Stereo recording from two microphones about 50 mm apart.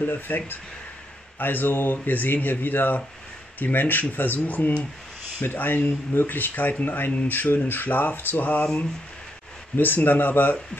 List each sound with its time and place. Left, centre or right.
0.0 s speech: left
1.4 s speech: left
9.8 s speech: left